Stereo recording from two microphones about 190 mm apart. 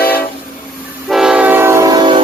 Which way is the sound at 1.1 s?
5° right (ahead or behind).